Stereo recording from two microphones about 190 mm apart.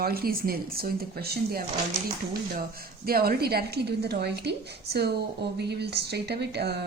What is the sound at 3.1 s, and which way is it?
A woman's voice, 55° right (ahead or behind).